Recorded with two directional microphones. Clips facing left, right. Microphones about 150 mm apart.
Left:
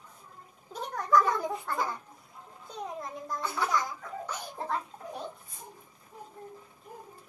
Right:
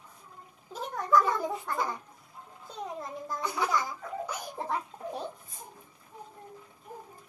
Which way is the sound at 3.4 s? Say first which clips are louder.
Right 1 dB; 15° right (ahead or behind).